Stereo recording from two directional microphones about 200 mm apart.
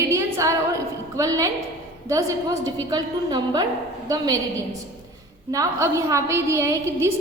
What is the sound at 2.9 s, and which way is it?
Speech, 20° right (ahead or behind).